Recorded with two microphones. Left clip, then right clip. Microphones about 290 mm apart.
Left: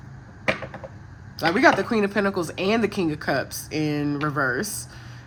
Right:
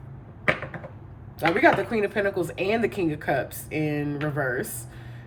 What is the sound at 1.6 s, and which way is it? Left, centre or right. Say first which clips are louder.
Speech: left 2 dB; centre.